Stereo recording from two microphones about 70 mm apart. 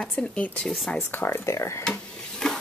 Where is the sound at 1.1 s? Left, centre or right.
Left.